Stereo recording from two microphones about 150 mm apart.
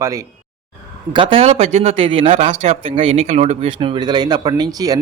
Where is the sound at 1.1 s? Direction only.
35° right (ahead or behind).